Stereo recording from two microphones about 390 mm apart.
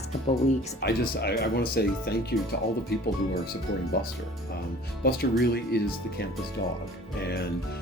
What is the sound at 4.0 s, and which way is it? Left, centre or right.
Speech, left.